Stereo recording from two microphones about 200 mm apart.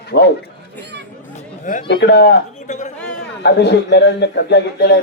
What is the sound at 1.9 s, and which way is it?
Speech, 60° left (ahead or behind).